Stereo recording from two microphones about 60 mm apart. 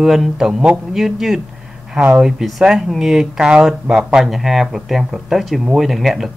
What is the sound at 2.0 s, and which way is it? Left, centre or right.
Speech, right.